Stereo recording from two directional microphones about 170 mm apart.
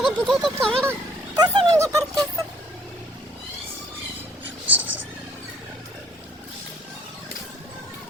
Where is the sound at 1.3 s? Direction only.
25° right (ahead or behind).